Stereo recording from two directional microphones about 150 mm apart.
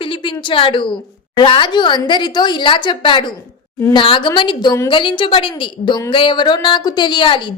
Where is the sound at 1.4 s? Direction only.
35° left (ahead or behind).